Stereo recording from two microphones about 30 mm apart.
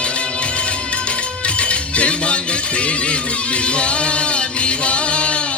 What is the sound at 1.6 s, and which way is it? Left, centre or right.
Music, left.